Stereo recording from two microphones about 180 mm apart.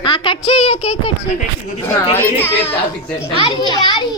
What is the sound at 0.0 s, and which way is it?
Speech, 25° left (ahead or behind).